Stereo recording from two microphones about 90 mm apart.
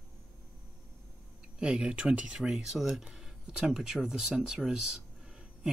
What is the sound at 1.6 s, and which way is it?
Speech, 10° right (ahead or behind).